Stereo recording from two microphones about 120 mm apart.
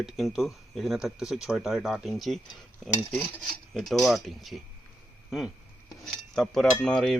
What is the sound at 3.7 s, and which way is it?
Speech, centre (ahead or behind).